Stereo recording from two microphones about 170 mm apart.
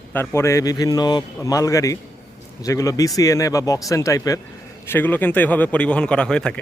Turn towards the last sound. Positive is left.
turn(degrees=5)  # may be behind; listen again after turning